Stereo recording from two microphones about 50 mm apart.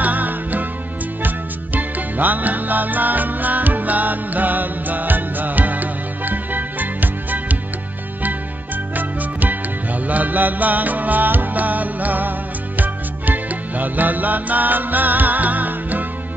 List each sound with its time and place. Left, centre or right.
0.0 s music: right
8.9 s music: right